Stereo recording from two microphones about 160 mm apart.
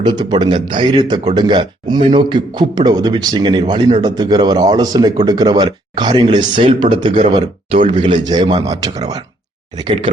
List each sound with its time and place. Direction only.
0.0 s speech: 25° right (ahead or behind)